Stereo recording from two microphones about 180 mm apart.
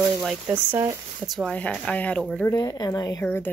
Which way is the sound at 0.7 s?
15° right (ahead or behind).